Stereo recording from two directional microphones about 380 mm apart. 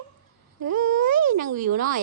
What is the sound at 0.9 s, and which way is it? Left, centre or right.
Speech, right.